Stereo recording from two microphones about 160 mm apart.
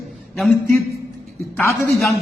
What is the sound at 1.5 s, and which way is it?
Speech, 15° left (ahead or behind).